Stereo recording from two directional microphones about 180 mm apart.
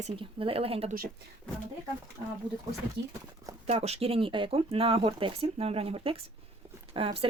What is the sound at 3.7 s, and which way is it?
Speech, 35° right (ahead or behind).